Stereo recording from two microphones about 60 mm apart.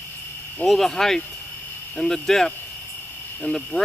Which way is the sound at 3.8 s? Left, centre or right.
Left.